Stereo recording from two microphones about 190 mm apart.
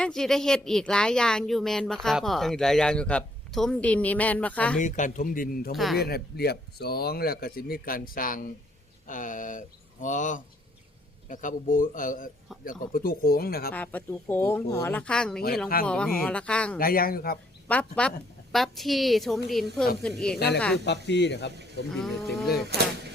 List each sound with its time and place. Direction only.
0.0 s a woman's voice: centre (ahead or behind)
4.8 s a man's voice: 40° left (ahead or behind)
5.7 s a woman's voice: centre (ahead or behind)
6.0 s a man's voice: 55° left (ahead or behind)
13.7 s a woman's voice: 10° left (ahead or behind)
16.7 s a man's voice: 50° left (ahead or behind)
17.7 s a woman's voice: 5° left (ahead or behind)
20.8 s speech: 65° left (ahead or behind)
21.8 s a woman's voice: centre (ahead or behind)
22.7 s speech: 60° right (ahead or behind)